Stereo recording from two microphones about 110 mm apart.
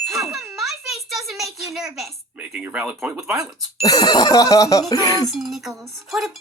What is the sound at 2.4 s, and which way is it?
Speech, 10° right (ahead or behind).